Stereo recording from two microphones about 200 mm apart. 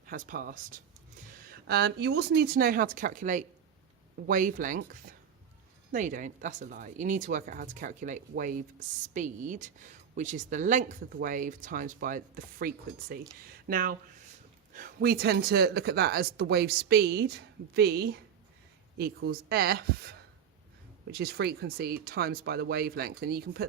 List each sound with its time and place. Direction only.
0.1 s speech: 45° right (ahead or behind)